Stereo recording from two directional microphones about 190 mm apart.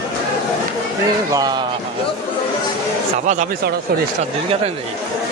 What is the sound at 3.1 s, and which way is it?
Speech, 40° right (ahead or behind).